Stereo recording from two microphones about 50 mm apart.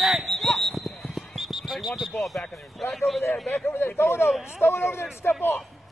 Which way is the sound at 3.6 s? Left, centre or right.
Left.